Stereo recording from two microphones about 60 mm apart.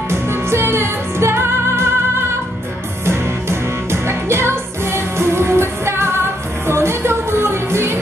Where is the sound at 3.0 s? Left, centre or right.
Right.